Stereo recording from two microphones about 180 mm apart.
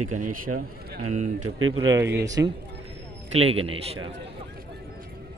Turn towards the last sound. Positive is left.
turn(degrees=-30)  # may be behind; listen again after turning